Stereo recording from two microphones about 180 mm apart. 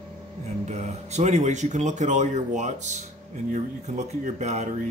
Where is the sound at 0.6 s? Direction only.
40° right (ahead or behind).